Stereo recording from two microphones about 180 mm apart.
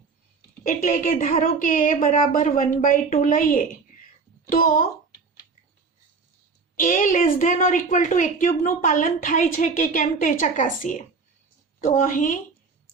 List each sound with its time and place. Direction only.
0.6 s a woman's voice: 50° left (ahead or behind)
6.7 s a woman's voice: 45° left (ahead or behind)